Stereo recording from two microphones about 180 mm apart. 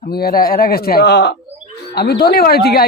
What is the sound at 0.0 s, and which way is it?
Speech, 55° left (ahead or behind).